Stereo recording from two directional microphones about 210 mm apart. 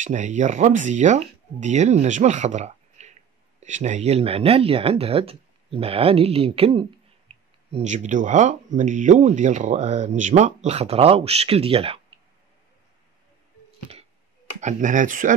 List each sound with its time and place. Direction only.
0.0 s speech: 35° right (ahead or behind)
14.6 s speech: 35° right (ahead or behind)